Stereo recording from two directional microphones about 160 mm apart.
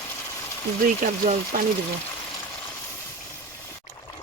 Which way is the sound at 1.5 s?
60° right (ahead or behind).